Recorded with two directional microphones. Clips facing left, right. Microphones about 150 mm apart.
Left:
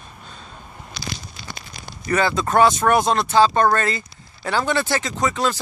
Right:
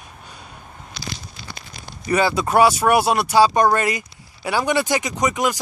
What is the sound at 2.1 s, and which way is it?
Speech, 10° right (ahead or behind).